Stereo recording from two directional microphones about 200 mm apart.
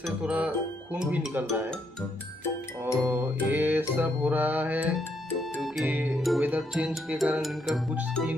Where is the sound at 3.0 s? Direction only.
10° right (ahead or behind).